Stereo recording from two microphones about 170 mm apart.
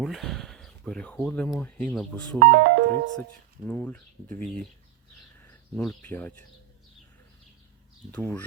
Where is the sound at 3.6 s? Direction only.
10° left (ahead or behind).